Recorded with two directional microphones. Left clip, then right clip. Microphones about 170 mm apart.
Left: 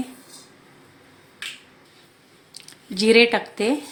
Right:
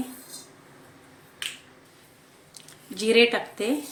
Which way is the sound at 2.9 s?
50° left (ahead or behind).